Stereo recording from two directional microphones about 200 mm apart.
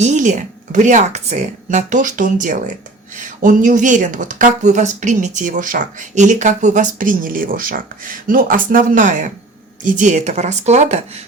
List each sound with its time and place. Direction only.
0.0 s speech: 35° right (ahead or behind)